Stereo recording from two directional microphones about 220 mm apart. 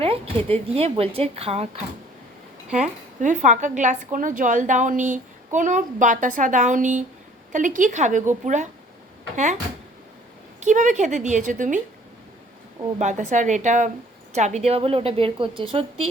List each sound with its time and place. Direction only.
0.0 s a woman's voice: 25° right (ahead or behind)
2.8 s a woman's voice: 35° right (ahead or behind)
10.6 s a woman's voice: 35° right (ahead or behind)
13.0 s a woman's voice: 30° right (ahead or behind)